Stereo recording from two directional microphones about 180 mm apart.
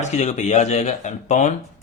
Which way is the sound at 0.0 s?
40° left (ahead or behind).